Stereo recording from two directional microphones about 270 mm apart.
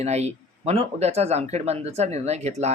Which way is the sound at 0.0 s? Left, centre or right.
Right.